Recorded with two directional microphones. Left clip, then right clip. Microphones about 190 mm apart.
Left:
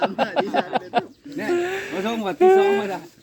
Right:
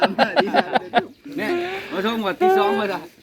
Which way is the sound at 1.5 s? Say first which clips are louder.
Left 2 dB; 40° left (ahead or behind).